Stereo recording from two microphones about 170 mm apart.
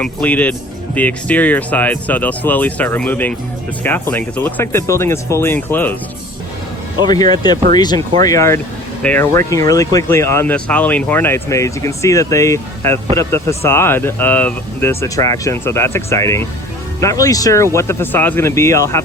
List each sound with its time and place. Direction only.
0.0 s speech: 10° left (ahead or behind)
7.0 s speech: 25° left (ahead or behind)